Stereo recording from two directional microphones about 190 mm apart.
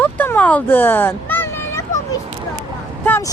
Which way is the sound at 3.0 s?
10° left (ahead or behind).